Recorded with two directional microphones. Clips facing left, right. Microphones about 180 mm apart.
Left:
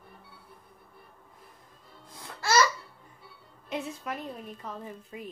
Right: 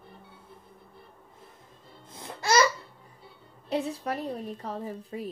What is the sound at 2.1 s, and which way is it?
Babbling, 20° right (ahead or behind).